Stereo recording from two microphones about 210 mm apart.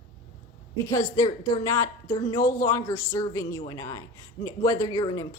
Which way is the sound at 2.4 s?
40° left (ahead or behind).